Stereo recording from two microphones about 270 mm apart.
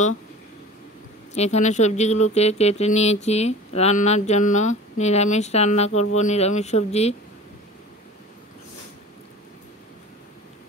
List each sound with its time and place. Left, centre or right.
1.3 s speech: left